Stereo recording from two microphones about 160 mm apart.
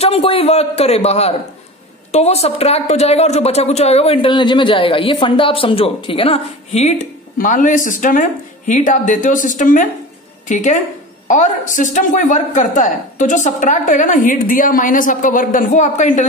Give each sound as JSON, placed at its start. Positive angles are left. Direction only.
{"t": 0.0, "sound": "a woman's voice", "side_deg": 35}
{"t": 7.3, "sound": "speech", "side_deg": 55}